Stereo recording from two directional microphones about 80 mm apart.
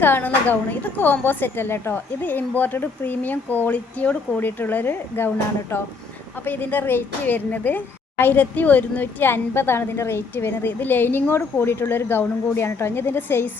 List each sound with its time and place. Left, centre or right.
0.0 s a woman's voice: left
6.4 s a woman's voice: left